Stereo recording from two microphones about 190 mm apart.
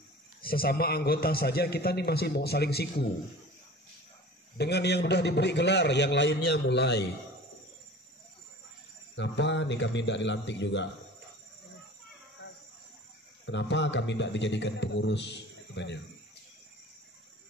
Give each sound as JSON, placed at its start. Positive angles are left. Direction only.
{"t": 0.4, "sound": "a man's voice", "side_deg": 50}
{"t": 4.6, "sound": "a man's voice", "side_deg": 60}
{"t": 9.1, "sound": "speech", "side_deg": 70}
{"t": 13.5, "sound": "speech", "side_deg": 70}